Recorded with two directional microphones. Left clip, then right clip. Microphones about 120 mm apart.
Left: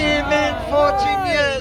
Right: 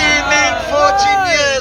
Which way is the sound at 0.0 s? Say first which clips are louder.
Right 6 dB; 20° right (ahead or behind).